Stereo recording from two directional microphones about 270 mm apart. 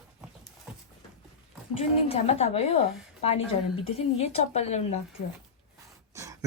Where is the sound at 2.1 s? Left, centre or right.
Left.